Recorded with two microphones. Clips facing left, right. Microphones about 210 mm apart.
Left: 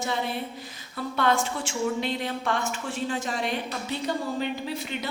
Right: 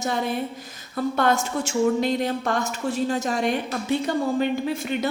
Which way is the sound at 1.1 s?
45° right (ahead or behind).